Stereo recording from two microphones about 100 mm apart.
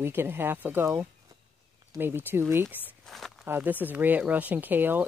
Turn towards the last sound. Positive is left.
turn(degrees=-20)  # may be behind; listen again after turning